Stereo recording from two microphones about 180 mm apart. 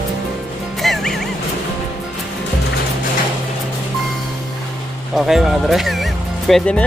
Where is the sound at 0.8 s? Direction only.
Centre (ahead or behind).